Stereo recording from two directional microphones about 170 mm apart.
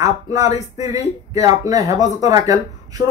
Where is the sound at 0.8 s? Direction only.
40° left (ahead or behind).